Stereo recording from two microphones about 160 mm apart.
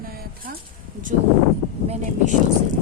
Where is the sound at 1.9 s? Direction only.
50° right (ahead or behind).